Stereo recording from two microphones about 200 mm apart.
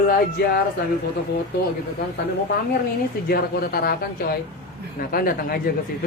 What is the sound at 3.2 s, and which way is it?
Speech, 50° left (ahead or behind).